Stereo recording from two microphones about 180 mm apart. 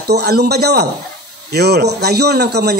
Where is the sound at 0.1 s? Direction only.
65° right (ahead or behind).